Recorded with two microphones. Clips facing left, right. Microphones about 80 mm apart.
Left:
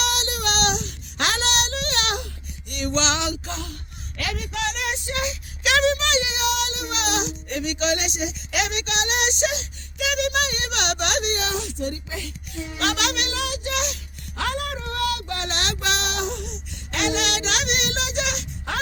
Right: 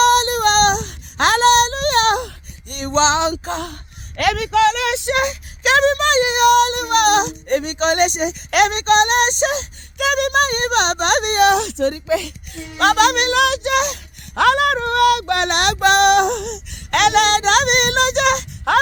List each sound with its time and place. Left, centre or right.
0.0 s child singing: right
4.2 s speech: right
12.0 s a child's voice: right
12.8 s speech: right
13.4 s speech: right
13.7 s a sound: right
14.4 s child singing: right
17.2 s child singing: right